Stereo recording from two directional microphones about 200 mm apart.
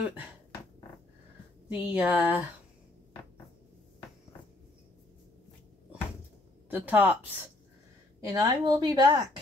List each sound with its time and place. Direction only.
1.7 s speech: 10° right (ahead or behind)
6.7 s a woman's voice: 10° right (ahead or behind)